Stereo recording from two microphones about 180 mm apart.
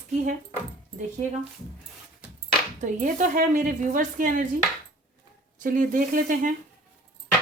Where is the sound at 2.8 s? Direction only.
45° right (ahead or behind).